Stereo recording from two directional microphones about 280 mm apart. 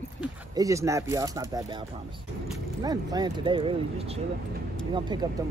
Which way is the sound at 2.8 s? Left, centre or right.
Centre.